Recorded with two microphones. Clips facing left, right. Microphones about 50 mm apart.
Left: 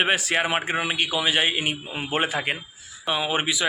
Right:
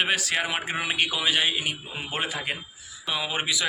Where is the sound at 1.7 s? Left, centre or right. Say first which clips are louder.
Left 4 dB; left.